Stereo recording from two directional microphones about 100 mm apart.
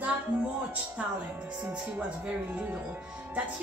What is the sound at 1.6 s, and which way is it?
Speech, 15° right (ahead or behind).